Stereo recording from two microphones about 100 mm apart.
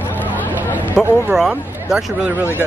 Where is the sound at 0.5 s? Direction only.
20° right (ahead or behind).